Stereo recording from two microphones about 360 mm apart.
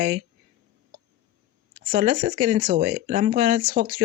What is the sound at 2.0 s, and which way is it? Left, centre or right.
Speech, centre.